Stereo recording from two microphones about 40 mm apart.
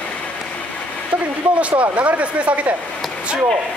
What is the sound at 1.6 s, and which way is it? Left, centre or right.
Speech, right.